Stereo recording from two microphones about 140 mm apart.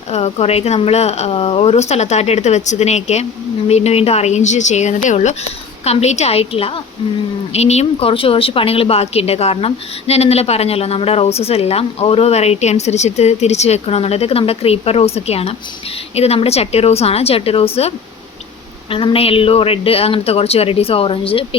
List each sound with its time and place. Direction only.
0.1 s speech: 50° left (ahead or behind)